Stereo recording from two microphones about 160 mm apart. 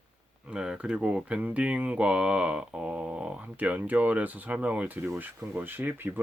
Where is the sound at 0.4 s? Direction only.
5° right (ahead or behind).